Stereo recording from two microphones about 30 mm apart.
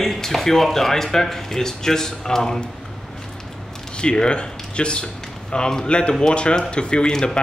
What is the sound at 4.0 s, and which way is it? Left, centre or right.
Speech, left.